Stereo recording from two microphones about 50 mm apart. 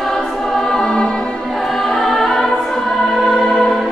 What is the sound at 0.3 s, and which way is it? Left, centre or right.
Music, centre.